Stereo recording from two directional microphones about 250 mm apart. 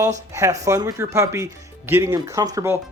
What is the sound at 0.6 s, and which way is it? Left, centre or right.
Speech, centre.